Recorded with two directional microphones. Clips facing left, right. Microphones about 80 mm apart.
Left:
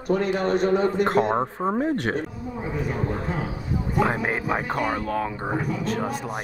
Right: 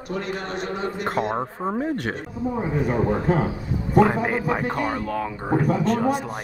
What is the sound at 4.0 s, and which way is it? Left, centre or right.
Speech, centre.